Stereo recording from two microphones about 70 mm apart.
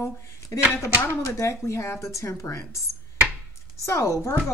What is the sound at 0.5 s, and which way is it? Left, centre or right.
Speech, left.